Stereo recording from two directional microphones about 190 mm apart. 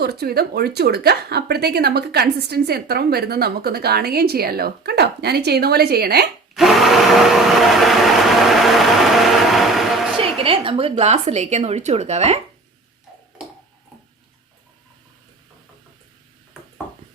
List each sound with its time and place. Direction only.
0.0 s a woman's voice: 55° right (ahead or behind)
6.5 s vacuum cleaner: centre (ahead or behind)
10.2 s a woman's voice: 30° right (ahead or behind)
16.6 s a sound: 5° right (ahead or behind)